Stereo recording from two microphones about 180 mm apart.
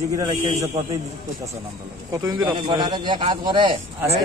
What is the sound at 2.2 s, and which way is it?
A man's voice, 25° right (ahead or behind).